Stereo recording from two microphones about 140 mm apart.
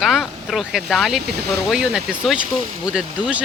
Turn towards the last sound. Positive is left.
turn(degrees=-5)  # may be behind; listen again after turning